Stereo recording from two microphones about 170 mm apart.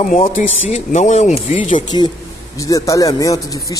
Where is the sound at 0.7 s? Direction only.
40° left (ahead or behind).